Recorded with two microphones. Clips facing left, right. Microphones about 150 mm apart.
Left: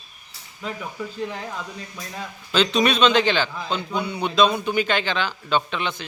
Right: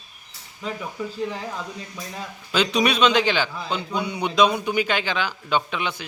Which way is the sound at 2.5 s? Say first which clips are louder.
Left 1 dB; 10° right (ahead or behind).